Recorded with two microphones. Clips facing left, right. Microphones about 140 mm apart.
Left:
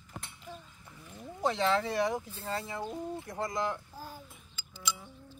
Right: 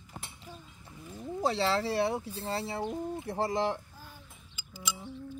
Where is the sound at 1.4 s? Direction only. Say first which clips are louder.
Even; 35° right (ahead or behind).